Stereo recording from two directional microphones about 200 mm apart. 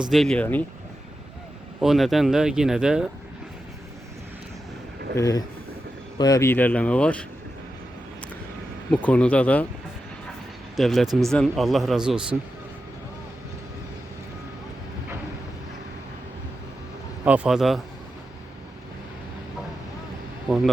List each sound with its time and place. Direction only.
0.1 s speech: centre (ahead or behind)
1.8 s speech: centre (ahead or behind)
5.1 s speech: 15° left (ahead or behind)
8.9 s speech: 5° left (ahead or behind)
10.8 s speech: centre (ahead or behind)
17.2 s speech: 5° right (ahead or behind)